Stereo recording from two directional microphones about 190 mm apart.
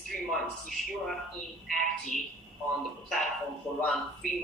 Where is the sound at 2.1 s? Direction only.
40° left (ahead or behind).